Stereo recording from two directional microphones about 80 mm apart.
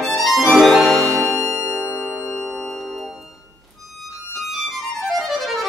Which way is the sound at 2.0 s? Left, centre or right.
Centre.